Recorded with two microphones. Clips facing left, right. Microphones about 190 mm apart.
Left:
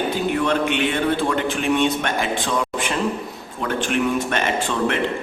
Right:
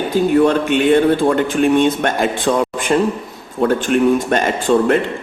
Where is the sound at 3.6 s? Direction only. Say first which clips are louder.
Right 8 dB; 40° right (ahead or behind).